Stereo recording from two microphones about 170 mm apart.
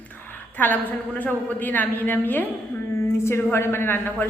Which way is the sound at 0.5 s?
10° left (ahead or behind).